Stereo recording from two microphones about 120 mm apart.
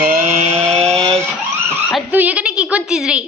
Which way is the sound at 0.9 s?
5° left (ahead or behind).